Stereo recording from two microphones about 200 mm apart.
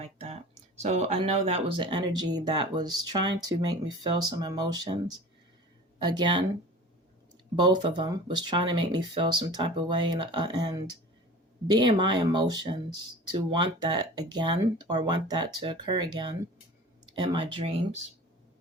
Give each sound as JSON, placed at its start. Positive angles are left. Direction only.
{"t": 0.0, "sound": "a sound", "side_deg": -30}
{"t": 0.8, "sound": "speech", "side_deg": -30}
{"t": 6.0, "sound": "speech", "side_deg": -20}
{"t": 7.5, "sound": "speech", "side_deg": -20}